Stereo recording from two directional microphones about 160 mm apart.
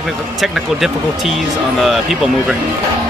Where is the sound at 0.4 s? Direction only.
Centre (ahead or behind).